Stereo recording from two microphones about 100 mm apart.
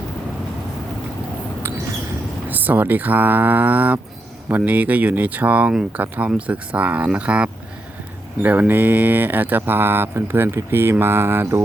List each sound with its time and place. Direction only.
2.5 s speech: 15° right (ahead or behind)